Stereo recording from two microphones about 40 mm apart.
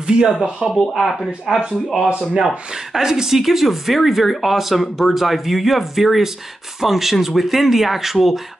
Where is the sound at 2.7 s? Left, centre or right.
Centre.